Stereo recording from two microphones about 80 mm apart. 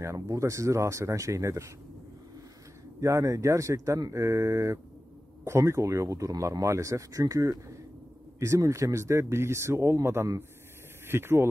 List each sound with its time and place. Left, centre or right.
0.0 s speech: right
3.0 s speech: right